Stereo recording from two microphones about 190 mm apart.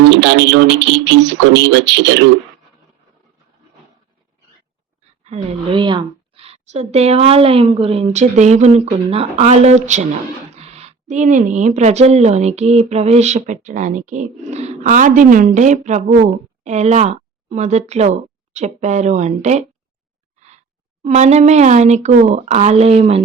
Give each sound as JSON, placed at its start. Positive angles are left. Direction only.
{"t": 0.0, "sound": "speech", "side_deg": -70}
{"t": 5.2, "sound": "a woman's voice", "side_deg": -35}